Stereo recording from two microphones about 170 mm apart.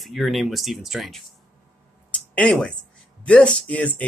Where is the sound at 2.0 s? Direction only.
10° left (ahead or behind).